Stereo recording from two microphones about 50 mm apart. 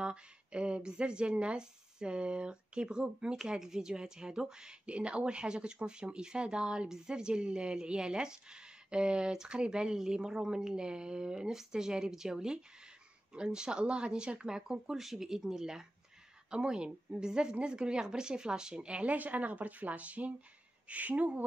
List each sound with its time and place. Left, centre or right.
0.0 s a woman's voice: right
19.1 s speech: right